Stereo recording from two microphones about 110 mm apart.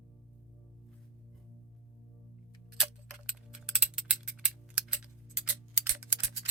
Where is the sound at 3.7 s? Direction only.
5° right (ahead or behind).